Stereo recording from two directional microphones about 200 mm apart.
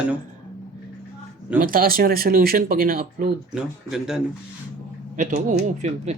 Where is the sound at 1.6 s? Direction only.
45° right (ahead or behind).